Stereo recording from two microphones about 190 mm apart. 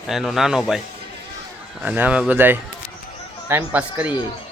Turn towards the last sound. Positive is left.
turn(degrees=-10)  # may be behind; listen again after turning